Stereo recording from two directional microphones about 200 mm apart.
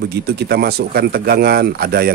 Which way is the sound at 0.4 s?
55° right (ahead or behind).